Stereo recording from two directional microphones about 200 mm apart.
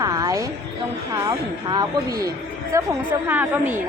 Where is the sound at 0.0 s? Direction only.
20° right (ahead or behind).